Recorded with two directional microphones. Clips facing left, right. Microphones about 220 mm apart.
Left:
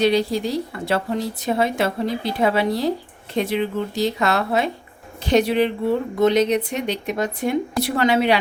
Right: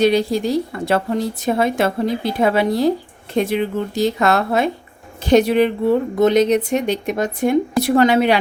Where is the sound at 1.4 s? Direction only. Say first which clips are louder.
Right 3 dB; 50° right (ahead or behind).